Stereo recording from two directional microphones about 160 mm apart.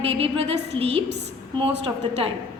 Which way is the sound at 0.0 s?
35° right (ahead or behind).